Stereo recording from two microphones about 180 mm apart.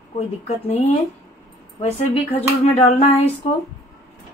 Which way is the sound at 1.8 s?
35° left (ahead or behind).